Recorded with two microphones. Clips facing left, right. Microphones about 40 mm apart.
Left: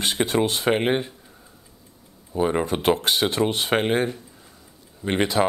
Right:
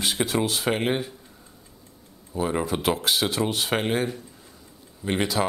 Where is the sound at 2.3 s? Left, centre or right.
Centre.